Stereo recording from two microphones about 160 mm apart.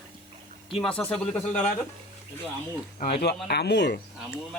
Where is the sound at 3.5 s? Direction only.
90° left.